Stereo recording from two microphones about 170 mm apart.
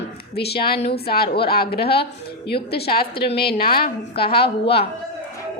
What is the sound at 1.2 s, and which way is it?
Speech, 30° left (ahead or behind).